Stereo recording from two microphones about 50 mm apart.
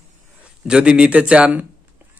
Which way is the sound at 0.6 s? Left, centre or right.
Centre.